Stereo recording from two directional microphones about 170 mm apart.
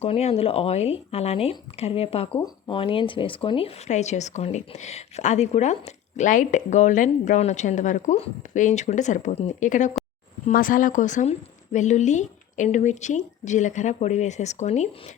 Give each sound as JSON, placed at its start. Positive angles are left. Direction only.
{"t": 0.0, "sound": "speech", "side_deg": 40}